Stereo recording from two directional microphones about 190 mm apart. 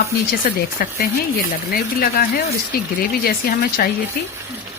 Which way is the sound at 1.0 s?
50° left (ahead or behind).